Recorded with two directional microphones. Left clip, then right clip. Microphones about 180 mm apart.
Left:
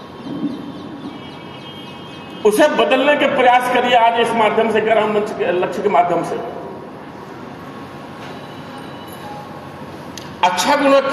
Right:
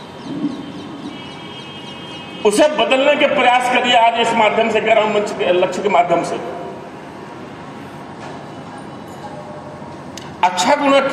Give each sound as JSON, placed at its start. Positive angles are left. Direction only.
{"t": 2.4, "sound": "a man's voice", "side_deg": -30}
{"t": 10.4, "sound": "a man's voice", "side_deg": -35}